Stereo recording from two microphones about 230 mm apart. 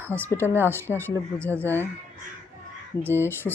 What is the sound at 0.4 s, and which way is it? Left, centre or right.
Speech, centre.